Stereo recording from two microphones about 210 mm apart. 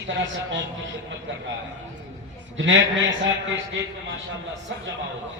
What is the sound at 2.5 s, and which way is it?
Speech, 60° right (ahead or behind).